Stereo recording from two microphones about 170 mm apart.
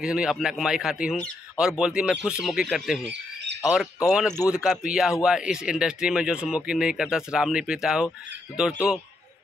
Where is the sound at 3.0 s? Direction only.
90° right.